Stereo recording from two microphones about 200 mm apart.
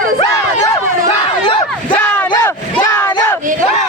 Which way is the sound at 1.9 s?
10° left (ahead or behind).